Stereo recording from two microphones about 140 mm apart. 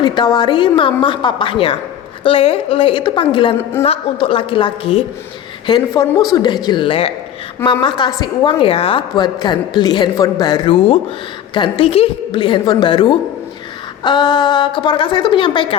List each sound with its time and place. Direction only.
0.0 s a woman's voice: 35° left (ahead or behind)
5.6 s a woman's voice: 30° left (ahead or behind)